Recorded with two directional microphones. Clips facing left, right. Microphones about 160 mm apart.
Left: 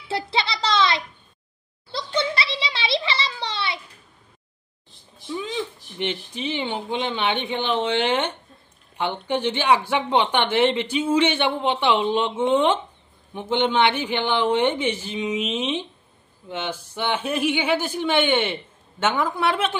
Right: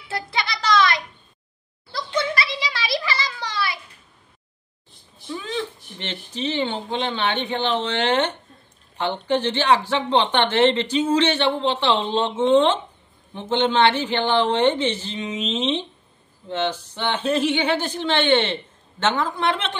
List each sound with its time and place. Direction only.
0.1 s music: 30° left (ahead or behind)
1.9 s a sound: 25° left (ahead or behind)
5.3 s speech: 15° left (ahead or behind)